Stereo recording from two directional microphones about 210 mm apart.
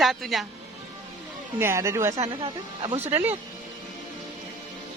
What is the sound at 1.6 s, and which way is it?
Speech, 15° right (ahead or behind).